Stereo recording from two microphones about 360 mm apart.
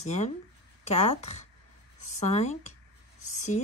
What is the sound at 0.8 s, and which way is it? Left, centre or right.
Speech, centre.